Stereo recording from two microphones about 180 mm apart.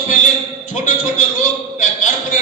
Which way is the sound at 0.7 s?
45° left (ahead or behind).